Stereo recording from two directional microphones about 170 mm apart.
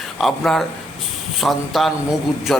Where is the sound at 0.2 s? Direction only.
Centre (ahead or behind).